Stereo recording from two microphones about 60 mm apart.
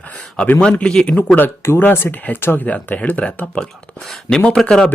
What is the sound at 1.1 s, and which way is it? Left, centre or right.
Speech, left.